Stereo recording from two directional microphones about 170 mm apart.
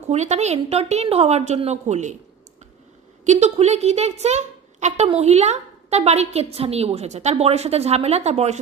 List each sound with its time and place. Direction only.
0.1 s speech: 40° right (ahead or behind)
3.3 s speech: 40° right (ahead or behind)